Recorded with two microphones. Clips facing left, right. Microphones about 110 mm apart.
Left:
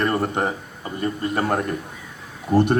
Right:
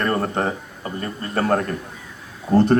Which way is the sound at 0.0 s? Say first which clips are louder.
Even; 15° left (ahead or behind).